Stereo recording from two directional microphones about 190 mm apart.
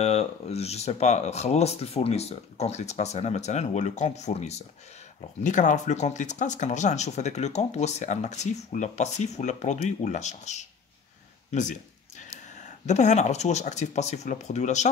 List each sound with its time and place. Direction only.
0.0 s speech: 30° left (ahead or behind)